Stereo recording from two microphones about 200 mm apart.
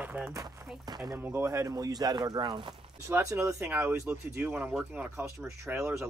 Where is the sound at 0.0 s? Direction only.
5° right (ahead or behind).